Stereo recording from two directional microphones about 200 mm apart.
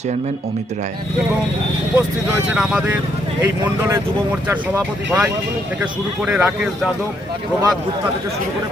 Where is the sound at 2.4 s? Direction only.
5° right (ahead or behind).